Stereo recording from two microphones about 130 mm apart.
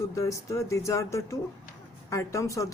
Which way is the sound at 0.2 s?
25° left (ahead or behind).